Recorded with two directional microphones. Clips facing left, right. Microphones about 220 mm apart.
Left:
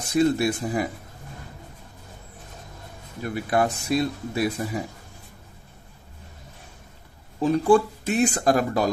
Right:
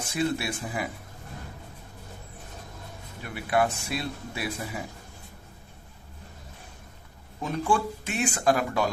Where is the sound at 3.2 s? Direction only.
40° left (ahead or behind).